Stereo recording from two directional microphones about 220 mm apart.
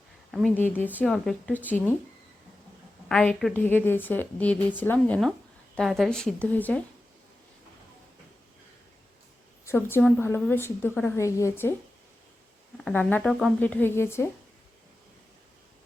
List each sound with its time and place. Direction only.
0.3 s a woman's voice: centre (ahead or behind)
3.1 s a woman's voice: 5° left (ahead or behind)
9.6 s a woman's voice: 10° left (ahead or behind)
12.7 s a woman's voice: 5° left (ahead or behind)